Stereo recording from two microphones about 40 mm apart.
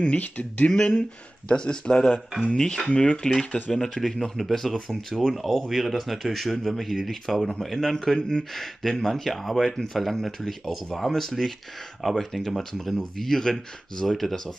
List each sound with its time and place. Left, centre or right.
0.0 s speech: left; by 2.9 s centre
3.0 s speech: left
4.0 s speech: centre
8.2 s speech: left
8.5 s speech: centre